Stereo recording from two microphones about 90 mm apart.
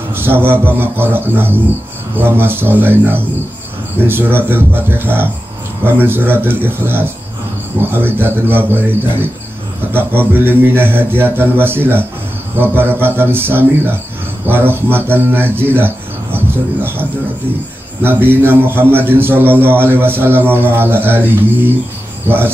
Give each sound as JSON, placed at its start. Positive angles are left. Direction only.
{"t": 0.1, "sound": "a man's voice", "side_deg": -25}
{"t": 18.0, "sound": "a man's voice", "side_deg": -25}